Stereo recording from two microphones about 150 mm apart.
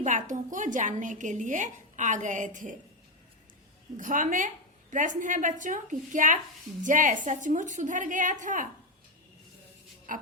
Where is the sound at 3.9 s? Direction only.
60° right (ahead or behind).